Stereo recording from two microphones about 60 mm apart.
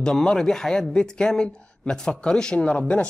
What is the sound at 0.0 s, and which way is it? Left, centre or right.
A man's voice, centre.